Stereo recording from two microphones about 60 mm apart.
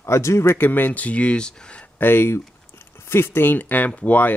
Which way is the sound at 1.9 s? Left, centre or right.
Left.